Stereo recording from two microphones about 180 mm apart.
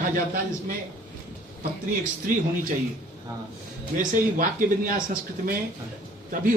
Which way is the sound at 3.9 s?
50° right (ahead or behind).